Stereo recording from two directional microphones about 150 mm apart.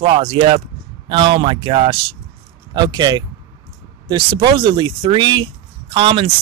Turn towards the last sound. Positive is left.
turn(degrees=-35)  # may be behind; listen again after turning